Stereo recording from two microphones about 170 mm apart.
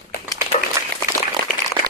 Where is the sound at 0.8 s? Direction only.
20° right (ahead or behind).